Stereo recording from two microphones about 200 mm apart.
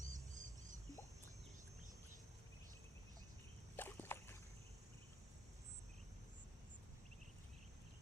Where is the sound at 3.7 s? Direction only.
10° left (ahead or behind).